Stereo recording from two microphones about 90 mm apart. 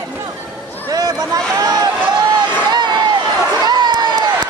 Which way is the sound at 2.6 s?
55° right (ahead or behind).